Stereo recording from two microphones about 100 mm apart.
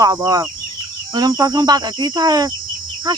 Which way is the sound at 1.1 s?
40° right (ahead or behind).